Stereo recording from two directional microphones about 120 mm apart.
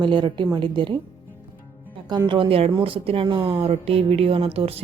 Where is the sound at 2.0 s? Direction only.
40° right (ahead or behind).